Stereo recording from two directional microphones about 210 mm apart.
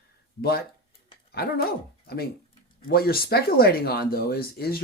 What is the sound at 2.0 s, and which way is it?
Speech, 45° left (ahead or behind).